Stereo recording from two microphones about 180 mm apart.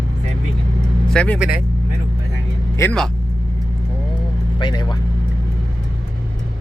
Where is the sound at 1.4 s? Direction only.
5° right (ahead or behind).